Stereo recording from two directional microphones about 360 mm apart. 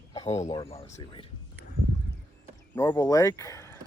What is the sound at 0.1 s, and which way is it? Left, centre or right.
Speech, centre.